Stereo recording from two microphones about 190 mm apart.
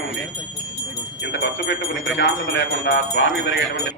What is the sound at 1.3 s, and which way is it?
Speech, 65° left (ahead or behind).